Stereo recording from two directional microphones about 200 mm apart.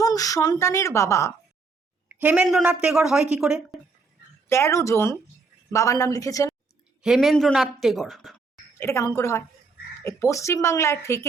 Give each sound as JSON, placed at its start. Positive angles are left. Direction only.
{"t": 0.0, "sound": "a woman's voice", "side_deg": 15}
{"t": 2.1, "sound": "a woman's voice", "side_deg": -5}
{"t": 4.4, "sound": "a woman's voice", "side_deg": 15}
{"t": 7.0, "sound": "speech", "side_deg": 0}
{"t": 8.8, "sound": "a woman's voice", "side_deg": 15}